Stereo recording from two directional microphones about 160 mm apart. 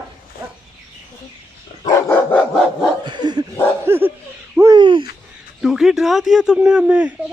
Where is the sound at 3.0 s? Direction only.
30° right (ahead or behind).